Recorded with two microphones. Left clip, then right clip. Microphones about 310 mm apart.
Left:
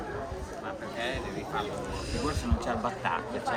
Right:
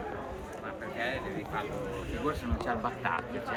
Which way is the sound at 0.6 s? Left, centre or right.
Left.